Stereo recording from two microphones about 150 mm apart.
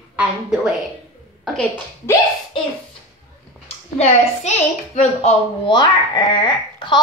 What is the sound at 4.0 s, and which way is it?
A woman's voice, 45° left (ahead or behind).